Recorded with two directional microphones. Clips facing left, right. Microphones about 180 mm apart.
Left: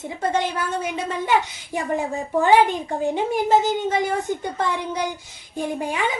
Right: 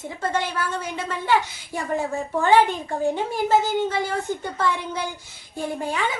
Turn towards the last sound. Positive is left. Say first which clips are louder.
# left 2 dB
turn(degrees=15)  # may be behind; listen again after turning